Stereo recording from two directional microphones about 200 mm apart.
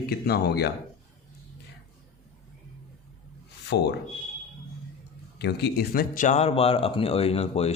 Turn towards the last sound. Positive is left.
turn(degrees=30)  # may be behind; listen again after turning